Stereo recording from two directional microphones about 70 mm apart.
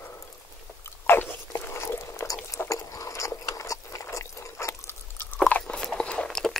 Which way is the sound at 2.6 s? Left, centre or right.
Left.